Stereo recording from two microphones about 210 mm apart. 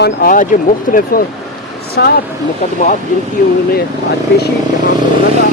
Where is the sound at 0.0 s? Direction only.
45° left (ahead or behind).